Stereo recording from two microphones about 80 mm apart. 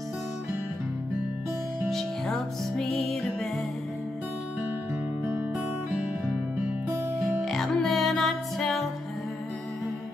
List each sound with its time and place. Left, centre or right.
1.9 s music: centre
5.9 s music: centre
7.4 s music: centre